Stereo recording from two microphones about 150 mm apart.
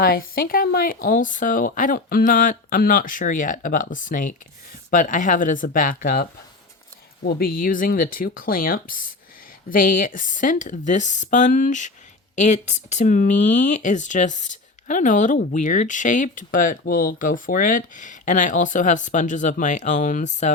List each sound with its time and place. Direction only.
0.0 s speech: 80° left
7.3 s speech: 80° left; by 20.5 s 55° left (ahead or behind)